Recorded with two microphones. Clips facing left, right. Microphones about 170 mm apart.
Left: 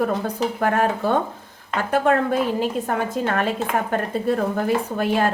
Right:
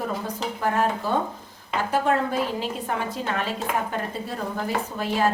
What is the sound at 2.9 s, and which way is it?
Speech, 50° left (ahead or behind).